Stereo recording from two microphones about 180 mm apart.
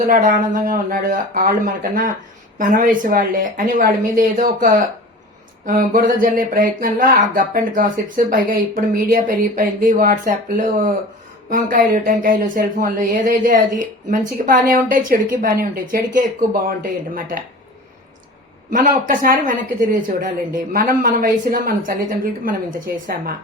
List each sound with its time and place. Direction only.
0.0 s speech: 45° right (ahead or behind)
18.7 s speech: 50° right (ahead or behind)